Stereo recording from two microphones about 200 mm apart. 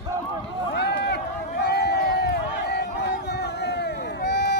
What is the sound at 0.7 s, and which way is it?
Run, 55° left (ahead or behind).